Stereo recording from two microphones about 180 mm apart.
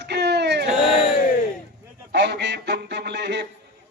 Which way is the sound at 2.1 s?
70° right (ahead or behind).